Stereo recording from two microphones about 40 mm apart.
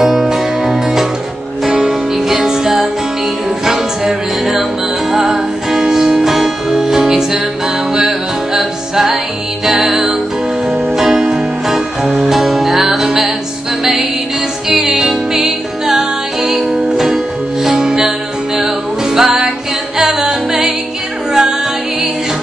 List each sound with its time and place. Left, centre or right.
0.0 s music: centre
8.5 s music: centre
11.1 s music: centre
14.7 s music: centre